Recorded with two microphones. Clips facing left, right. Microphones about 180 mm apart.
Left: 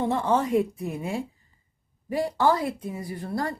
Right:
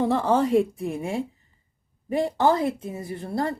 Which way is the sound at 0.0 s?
35° right (ahead or behind).